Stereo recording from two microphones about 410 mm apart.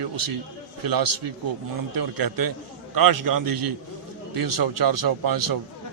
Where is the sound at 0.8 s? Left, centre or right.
Right.